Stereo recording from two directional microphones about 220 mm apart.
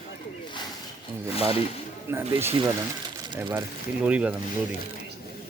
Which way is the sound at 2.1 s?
10° right (ahead or behind).